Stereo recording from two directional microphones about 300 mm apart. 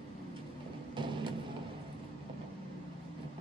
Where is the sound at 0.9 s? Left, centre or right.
Centre.